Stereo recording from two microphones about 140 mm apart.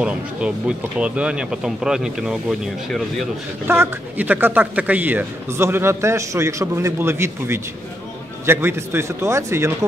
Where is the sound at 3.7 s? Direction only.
15° right (ahead or behind).